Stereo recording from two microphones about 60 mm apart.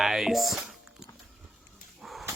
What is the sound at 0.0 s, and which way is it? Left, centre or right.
Speech, centre.